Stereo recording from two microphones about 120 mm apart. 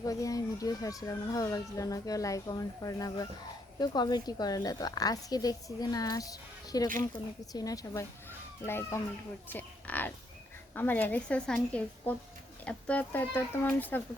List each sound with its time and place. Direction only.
0.0 s a woman's voice: 30° left (ahead or behind)
9.5 s a sound: 15° left (ahead or behind)
10.8 s a woman's voice: 15° left (ahead or behind)